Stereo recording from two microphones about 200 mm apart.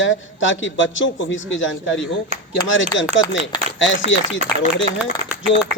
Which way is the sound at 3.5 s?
20° left (ahead or behind).